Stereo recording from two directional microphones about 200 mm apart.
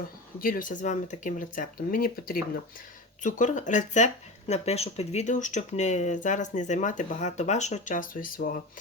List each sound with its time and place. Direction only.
0.3 s speech: 45° left (ahead or behind)